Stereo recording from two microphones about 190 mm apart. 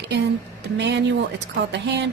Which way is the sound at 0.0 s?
65° right (ahead or behind).